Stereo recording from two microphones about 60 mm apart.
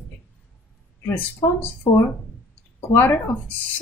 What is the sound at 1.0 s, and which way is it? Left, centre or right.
Speech, left.